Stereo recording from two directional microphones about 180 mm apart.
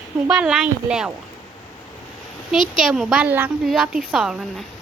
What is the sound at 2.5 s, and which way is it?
Speech, 5° right (ahead or behind).